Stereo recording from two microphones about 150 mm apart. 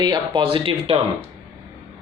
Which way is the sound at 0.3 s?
35° right (ahead or behind).